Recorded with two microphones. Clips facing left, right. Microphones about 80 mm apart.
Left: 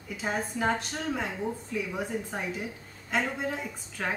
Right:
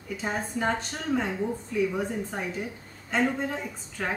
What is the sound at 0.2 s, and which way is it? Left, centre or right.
A child's voice, centre.